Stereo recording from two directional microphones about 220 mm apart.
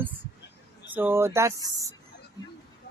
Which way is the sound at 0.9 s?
10° right (ahead or behind).